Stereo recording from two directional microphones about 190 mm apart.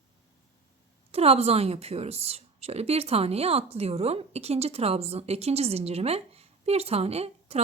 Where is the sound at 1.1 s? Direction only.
30° right (ahead or behind).